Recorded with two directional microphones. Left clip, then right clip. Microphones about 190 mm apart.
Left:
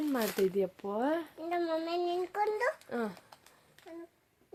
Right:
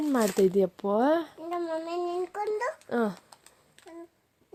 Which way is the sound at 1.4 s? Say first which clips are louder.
Right 1 dB; 10° left (ahead or behind).